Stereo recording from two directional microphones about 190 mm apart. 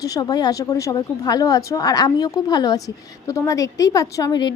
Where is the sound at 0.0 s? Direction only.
20° left (ahead or behind).